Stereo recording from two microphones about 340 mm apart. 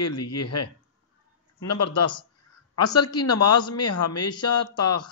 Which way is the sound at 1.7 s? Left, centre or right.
Left.